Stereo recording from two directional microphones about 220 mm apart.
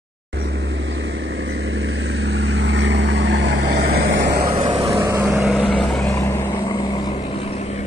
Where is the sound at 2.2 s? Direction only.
50° right (ahead or behind).